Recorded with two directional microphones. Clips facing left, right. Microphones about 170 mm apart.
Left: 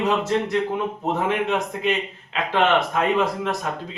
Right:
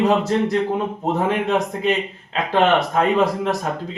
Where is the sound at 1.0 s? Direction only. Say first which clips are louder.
Right 2 dB; 35° right (ahead or behind).